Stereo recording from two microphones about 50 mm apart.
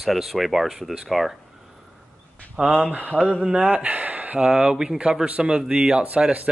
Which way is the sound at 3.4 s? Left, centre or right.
Centre.